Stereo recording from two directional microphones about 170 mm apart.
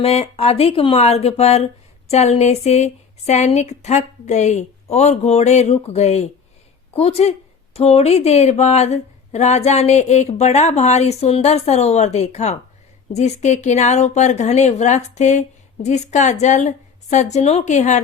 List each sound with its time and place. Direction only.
0.0 s a woman's voice: 35° left (ahead or behind)